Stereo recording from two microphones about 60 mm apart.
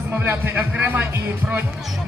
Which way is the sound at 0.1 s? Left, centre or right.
Right.